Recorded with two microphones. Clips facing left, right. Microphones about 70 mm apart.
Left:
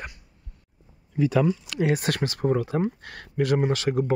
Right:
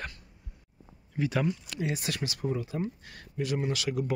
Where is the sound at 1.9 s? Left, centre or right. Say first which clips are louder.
Left 8 dB; left.